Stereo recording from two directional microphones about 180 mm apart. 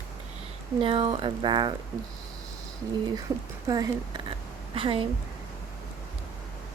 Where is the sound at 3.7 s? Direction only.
20° right (ahead or behind).